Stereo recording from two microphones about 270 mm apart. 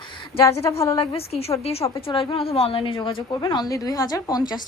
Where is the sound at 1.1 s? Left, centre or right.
Left.